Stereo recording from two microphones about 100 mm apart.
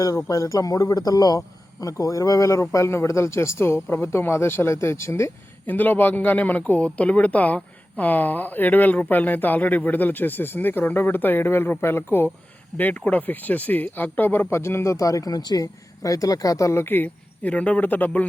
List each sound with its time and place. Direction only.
0.0 s a man's voice: 35° left (ahead or behind); by 18.3 s 15° left (ahead or behind)